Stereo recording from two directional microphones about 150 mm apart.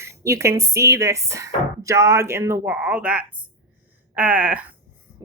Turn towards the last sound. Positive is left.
turn(degrees=-10)  # may be behind; listen again after turning